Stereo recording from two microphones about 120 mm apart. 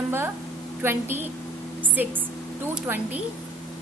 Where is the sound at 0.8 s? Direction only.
20° right (ahead or behind).